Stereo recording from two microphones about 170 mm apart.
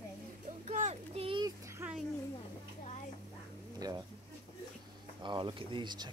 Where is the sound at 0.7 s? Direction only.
40° right (ahead or behind).